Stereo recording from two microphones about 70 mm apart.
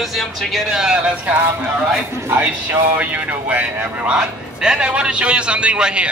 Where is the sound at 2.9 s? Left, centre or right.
Right.